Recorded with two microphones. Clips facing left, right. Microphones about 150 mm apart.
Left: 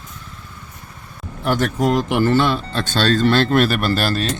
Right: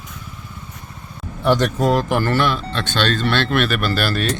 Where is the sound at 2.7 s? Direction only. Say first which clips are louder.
Left 2 dB; 40° left (ahead or behind).